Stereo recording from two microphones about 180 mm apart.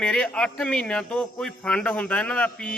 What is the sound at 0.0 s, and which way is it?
A man's voice, 5° left (ahead or behind).